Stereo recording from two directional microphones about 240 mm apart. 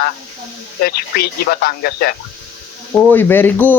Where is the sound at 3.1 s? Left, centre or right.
Centre.